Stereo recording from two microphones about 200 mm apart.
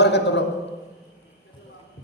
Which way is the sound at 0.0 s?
60° left (ahead or behind).